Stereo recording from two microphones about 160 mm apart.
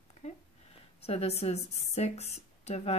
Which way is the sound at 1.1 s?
40° left (ahead or behind).